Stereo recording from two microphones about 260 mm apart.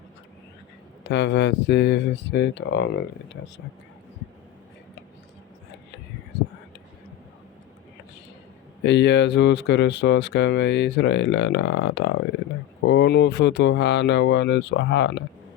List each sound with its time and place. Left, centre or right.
1.0 s speech: left
8.8 s speech: left